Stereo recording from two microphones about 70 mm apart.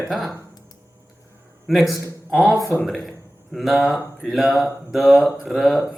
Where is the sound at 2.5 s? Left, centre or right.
Right.